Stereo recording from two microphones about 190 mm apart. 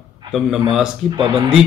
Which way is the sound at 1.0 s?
25° right (ahead or behind).